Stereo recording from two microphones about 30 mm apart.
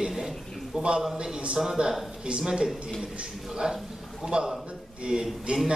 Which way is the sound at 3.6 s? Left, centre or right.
Right.